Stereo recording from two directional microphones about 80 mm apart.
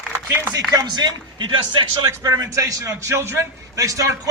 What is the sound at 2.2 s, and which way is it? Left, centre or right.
A man's voice, right.